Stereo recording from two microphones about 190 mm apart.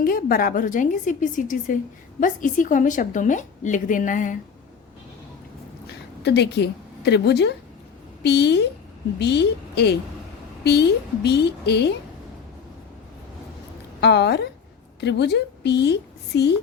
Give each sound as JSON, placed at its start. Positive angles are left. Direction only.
{"t": 0.0, "sound": "a woman's voice", "side_deg": 50}
{"t": 6.2, "sound": "a woman's voice", "side_deg": 60}
{"t": 14.0, "sound": "a woman's voice", "side_deg": 65}